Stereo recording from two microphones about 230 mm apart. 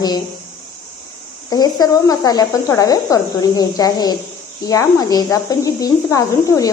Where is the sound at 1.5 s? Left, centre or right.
Centre.